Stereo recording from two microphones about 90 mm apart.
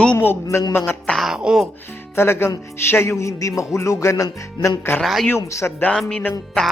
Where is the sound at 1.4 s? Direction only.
10° right (ahead or behind).